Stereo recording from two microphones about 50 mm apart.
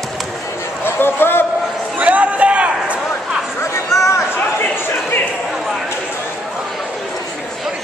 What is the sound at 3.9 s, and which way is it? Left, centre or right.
Chatter, left.